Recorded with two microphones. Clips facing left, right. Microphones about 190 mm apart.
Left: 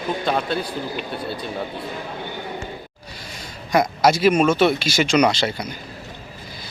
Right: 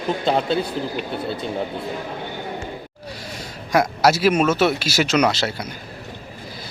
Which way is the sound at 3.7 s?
5° right (ahead or behind).